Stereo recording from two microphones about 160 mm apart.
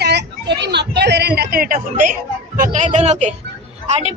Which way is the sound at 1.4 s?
70° right (ahead or behind).